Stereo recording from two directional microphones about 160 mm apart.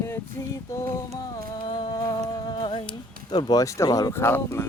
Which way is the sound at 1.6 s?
30° left (ahead or behind).